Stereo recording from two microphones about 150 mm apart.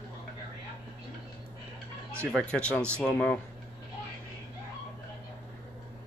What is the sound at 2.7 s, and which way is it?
Speech, 15° right (ahead or behind).